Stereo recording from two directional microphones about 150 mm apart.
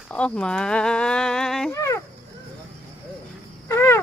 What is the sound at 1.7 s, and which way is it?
Speech, 20° left (ahead or behind).